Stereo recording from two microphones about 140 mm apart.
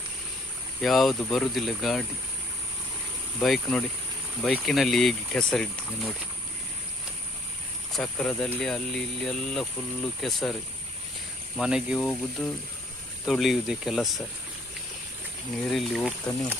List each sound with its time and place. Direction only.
0.8 s speech: centre (ahead or behind)
3.4 s speech: 5° left (ahead or behind)
7.9 s speech: 5° left (ahead or behind)
11.5 s speech: 5° right (ahead or behind)
15.6 s speech: centre (ahead or behind)